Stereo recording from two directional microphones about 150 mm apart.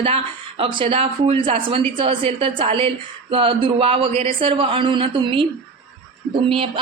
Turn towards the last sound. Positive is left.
turn(degrees=-35)  # may be behind; listen again after turning